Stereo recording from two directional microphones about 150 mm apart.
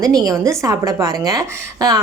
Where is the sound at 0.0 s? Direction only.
25° right (ahead or behind).